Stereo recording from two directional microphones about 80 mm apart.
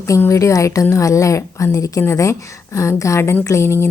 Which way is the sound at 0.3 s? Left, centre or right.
Left.